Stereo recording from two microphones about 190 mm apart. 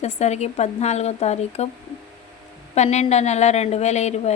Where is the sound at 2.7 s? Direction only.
35° left (ahead or behind).